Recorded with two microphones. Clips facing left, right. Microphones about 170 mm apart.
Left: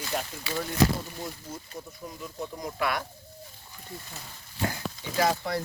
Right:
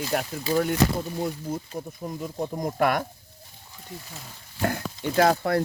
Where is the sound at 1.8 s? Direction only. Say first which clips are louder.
Right 7 dB; 50° right (ahead or behind).